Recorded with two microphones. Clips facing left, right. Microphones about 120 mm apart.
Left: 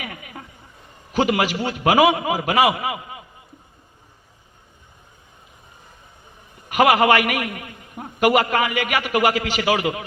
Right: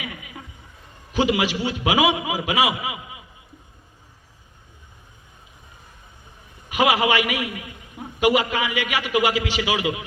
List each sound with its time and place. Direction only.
0.0 s a sound: 50° left (ahead or behind)
1.1 s a man's voice: 45° left (ahead or behind)
6.7 s a man's voice: 50° left (ahead or behind)